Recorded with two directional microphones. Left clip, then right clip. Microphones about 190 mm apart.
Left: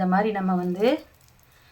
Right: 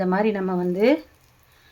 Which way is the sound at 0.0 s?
30° right (ahead or behind).